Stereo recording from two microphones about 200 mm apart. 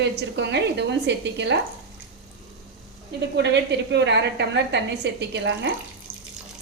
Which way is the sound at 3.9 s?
60° right (ahead or behind).